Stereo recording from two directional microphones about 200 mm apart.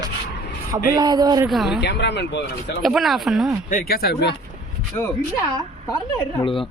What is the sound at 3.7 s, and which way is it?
Speech, 45° left (ahead or behind).